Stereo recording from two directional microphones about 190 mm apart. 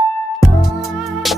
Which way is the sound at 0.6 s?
Centre (ahead or behind).